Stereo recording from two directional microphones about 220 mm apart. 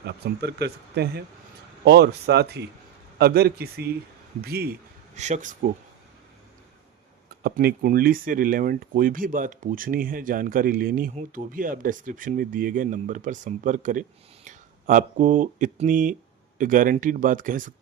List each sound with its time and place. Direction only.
0.1 s speech: 50° right (ahead or behind); by 5.5 s 30° right (ahead or behind)
7.4 s speech: 45° right (ahead or behind)